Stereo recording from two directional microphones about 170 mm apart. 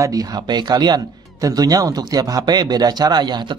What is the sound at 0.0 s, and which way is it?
A man's voice, 20° right (ahead or behind).